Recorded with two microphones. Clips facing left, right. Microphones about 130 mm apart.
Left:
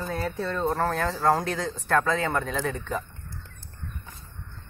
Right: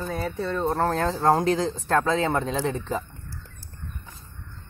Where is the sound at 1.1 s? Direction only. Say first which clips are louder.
Right 3 dB; 30° right (ahead or behind).